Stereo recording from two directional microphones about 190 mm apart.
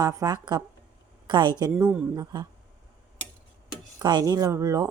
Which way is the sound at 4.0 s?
20° right (ahead or behind).